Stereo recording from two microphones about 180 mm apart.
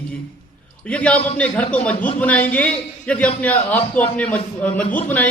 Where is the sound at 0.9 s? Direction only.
5° left (ahead or behind).